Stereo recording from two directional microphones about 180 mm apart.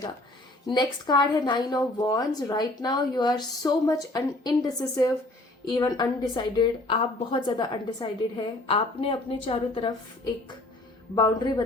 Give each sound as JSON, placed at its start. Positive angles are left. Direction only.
{"t": 0.7, "sound": "a woman's voice", "side_deg": 25}
{"t": 11.1, "sound": "a woman's voice", "side_deg": 25}